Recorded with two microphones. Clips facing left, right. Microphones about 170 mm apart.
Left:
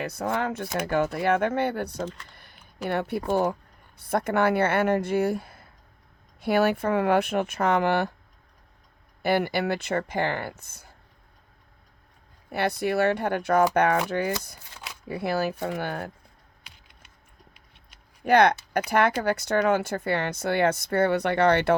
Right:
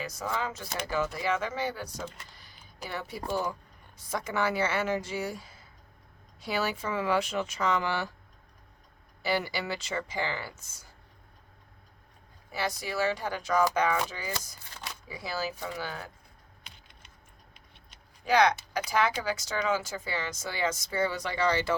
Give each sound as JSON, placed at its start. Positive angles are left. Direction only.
{"t": 0.0, "sound": "speech", "side_deg": 60}
{"t": 9.2, "sound": "speech", "side_deg": 55}
{"t": 12.5, "sound": "speech", "side_deg": 60}
{"t": 14.7, "sound": "a sound", "side_deg": 10}
{"t": 15.0, "sound": "speech", "side_deg": 60}
{"t": 16.6, "sound": "typing", "side_deg": 10}
{"t": 18.3, "sound": "speech", "side_deg": 60}